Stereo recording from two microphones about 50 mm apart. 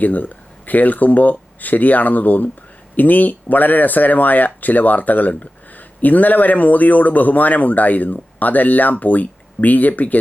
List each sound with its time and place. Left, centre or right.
0.0 s speech: left